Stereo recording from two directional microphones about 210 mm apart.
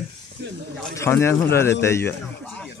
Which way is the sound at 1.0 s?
10° left (ahead or behind).